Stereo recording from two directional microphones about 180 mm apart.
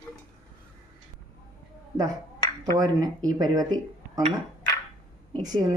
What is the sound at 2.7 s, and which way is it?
Speech, 20° right (ahead or behind).